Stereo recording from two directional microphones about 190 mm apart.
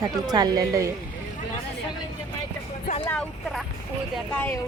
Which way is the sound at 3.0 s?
5° left (ahead or behind).